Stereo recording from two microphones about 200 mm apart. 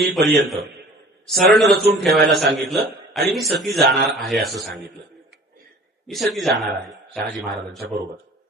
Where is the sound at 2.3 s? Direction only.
55° right (ahead or behind).